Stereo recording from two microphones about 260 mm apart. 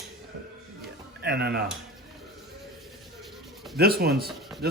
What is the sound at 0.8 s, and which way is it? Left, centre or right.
Music, right.